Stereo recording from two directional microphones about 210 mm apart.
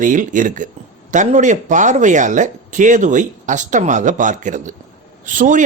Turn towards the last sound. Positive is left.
turn(degrees=-40)  # may be behind; listen again after turning